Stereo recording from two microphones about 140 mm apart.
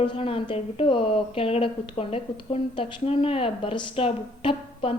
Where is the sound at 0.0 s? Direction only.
40° left (ahead or behind).